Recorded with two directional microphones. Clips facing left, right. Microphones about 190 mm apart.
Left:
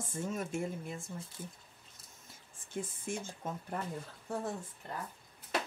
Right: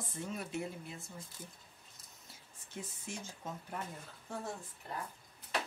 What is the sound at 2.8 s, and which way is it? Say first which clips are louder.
Speech: left 6 dB; 50° left (ahead or behind).